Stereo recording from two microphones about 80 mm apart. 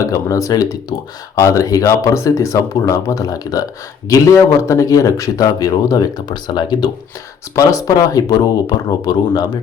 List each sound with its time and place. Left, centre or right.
0.0 s speech: left
7.5 s speech: left